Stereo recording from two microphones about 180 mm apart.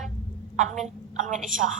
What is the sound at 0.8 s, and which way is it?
Speech, 45° right (ahead or behind).